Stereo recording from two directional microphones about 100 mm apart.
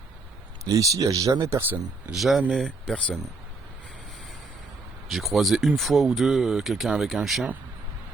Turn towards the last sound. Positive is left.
turn(degrees=0)  # may be behind; listen again after turning